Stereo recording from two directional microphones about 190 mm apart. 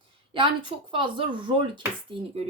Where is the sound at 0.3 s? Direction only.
25° right (ahead or behind).